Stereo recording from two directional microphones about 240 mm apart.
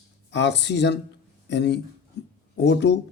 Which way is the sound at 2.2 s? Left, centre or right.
Left.